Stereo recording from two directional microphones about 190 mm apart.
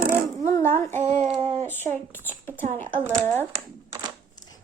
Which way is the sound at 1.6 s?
10° left (ahead or behind).